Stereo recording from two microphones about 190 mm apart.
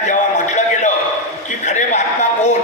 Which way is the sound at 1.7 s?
40° left (ahead or behind).